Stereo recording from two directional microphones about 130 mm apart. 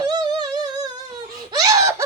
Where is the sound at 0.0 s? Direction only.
30° right (ahead or behind).